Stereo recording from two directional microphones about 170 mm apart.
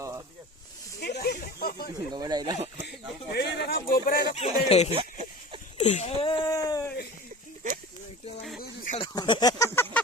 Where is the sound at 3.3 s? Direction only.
70° left (ahead or behind).